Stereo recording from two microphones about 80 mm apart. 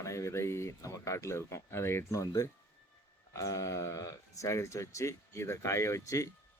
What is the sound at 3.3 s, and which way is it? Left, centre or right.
Speech, left.